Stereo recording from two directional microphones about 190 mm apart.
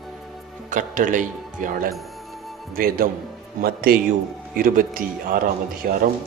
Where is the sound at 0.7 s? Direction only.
40° right (ahead or behind).